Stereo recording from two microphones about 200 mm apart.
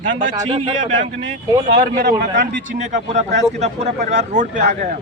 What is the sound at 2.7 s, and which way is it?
A man's voice, 35° right (ahead or behind).